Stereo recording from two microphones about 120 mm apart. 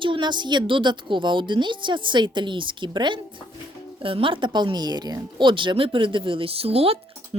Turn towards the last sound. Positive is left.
turn(degrees=-55)  # may be behind; listen again after turning